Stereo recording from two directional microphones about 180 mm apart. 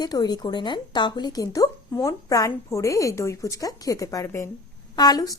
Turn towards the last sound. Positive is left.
turn(degrees=20)  # may be behind; listen again after turning